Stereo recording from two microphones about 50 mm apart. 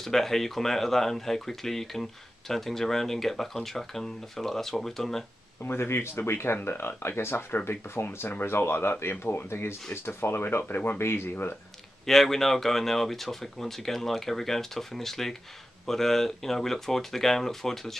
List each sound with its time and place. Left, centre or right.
0.0 s speech: centre
5.7 s speech: left
10.6 s speech: left
11.0 s speech: left
12.1 s speech: centre